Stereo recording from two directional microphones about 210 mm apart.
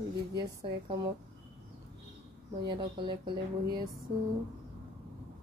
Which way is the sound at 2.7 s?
20° right (ahead or behind).